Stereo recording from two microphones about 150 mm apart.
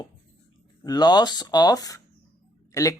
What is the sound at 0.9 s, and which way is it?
Speech, 25° left (ahead or behind).